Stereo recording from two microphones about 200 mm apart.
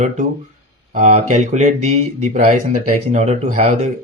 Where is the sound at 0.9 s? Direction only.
35° right (ahead or behind).